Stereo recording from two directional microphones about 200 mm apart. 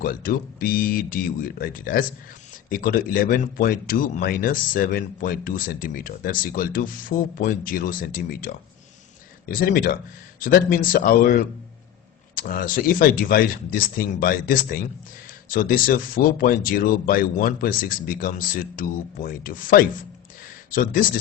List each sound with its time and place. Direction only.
0.0 s speech: 45° left (ahead or behind)